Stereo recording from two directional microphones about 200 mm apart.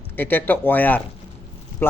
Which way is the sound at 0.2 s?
10° left (ahead or behind).